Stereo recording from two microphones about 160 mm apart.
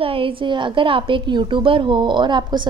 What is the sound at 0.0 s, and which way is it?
A woman's voice, 35° right (ahead or behind).